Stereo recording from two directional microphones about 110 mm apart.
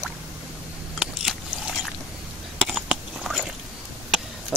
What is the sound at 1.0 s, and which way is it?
Vehicle, 5° right (ahead or behind).